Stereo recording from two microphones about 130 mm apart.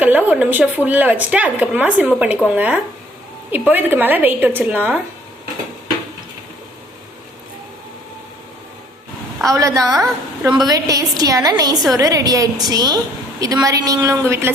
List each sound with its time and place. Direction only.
0.0 s a woman's voice: 10° right (ahead or behind)
9.4 s a woman's voice: 25° right (ahead or behind)